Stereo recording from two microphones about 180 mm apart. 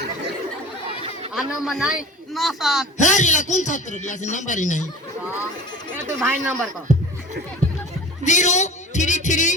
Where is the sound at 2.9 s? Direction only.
40° left (ahead or behind).